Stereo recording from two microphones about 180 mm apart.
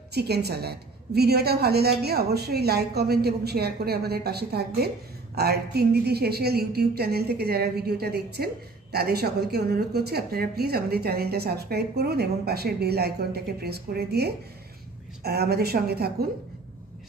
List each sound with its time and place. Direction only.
0.1 s a woman's voice: 65° right (ahead or behind)